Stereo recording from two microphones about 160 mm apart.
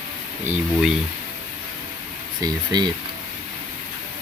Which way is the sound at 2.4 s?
25° right (ahead or behind).